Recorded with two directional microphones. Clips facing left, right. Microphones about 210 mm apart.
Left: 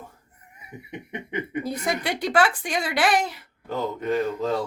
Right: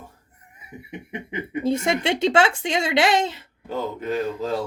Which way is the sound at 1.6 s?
25° right (ahead or behind).